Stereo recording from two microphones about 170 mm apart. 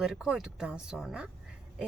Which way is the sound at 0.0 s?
5° right (ahead or behind).